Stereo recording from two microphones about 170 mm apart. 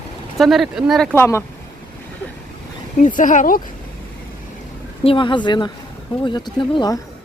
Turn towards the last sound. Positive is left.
turn(degrees=25)  # may be behind; listen again after turning